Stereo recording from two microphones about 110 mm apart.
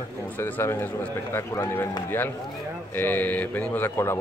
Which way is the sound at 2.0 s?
20° left (ahead or behind).